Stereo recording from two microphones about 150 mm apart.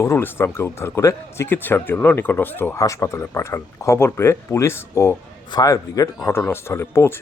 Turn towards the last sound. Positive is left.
turn(degrees=15)  # may be behind; listen again after turning